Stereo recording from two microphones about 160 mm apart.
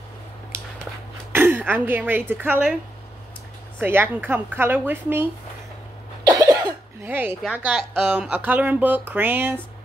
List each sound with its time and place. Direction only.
1.3 s speech: 10° right (ahead or behind)
3.8 s speech: 15° right (ahead or behind)
6.2 s cough: 25° right (ahead or behind)
7.5 s speech: 10° right (ahead or behind)